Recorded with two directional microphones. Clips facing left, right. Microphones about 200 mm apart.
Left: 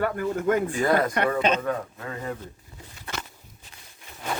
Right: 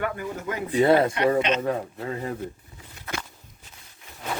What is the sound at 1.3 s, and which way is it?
Speech, 30° right (ahead or behind).